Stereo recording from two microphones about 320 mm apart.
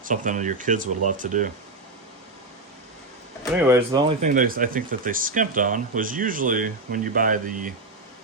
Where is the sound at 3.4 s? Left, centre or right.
Centre.